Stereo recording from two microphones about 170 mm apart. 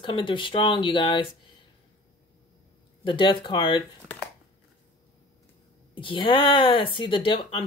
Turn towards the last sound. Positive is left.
turn(degrees=30)  # may be behind; listen again after turning